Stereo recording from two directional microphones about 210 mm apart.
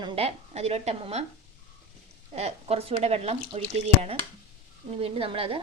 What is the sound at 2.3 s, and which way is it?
A woman's voice, 30° right (ahead or behind).